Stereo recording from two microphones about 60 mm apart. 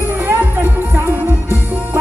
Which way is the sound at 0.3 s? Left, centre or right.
Right.